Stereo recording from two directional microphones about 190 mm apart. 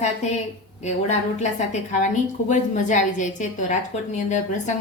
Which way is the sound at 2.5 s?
40° left (ahead or behind).